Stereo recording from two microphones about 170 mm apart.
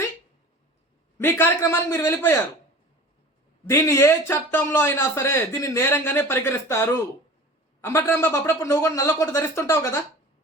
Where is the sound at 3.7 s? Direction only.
15° left (ahead or behind).